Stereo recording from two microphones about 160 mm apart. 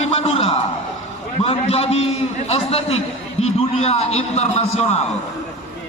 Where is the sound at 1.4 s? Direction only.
40° left (ahead or behind).